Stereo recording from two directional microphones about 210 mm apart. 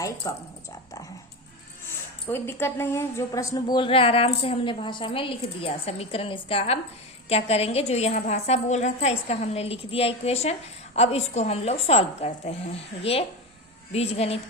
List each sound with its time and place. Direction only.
0.2 s speech: 15° left (ahead or behind)
2.2 s a woman's voice: 10° left (ahead or behind); by 14.3 s 30° left (ahead or behind)